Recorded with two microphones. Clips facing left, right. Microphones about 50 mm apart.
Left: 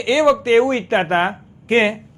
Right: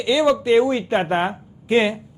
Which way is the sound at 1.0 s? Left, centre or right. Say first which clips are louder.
Left 3 dB; left.